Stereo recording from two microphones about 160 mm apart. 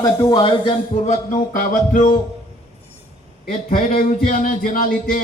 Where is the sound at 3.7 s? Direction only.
55° left (ahead or behind).